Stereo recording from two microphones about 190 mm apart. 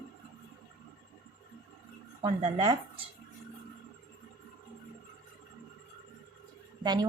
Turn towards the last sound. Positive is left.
turn(degrees=-20)  # may be behind; listen again after turning